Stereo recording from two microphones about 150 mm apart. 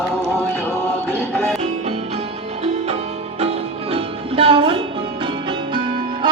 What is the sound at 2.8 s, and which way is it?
Music, 45° right (ahead or behind).